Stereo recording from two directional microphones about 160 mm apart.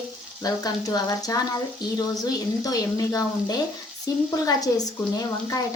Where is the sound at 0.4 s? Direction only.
25° left (ahead or behind).